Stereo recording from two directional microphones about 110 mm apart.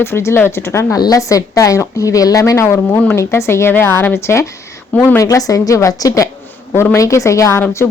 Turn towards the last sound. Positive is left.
turn(degrees=25)  # may be behind; listen again after turning